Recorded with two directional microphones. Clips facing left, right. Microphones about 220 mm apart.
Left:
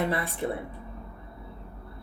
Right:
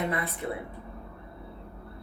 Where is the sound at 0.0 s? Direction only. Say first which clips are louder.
Left 2 dB; 30° left (ahead or behind).